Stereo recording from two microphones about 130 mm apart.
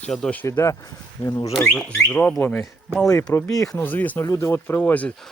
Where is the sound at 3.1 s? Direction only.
25° left (ahead or behind).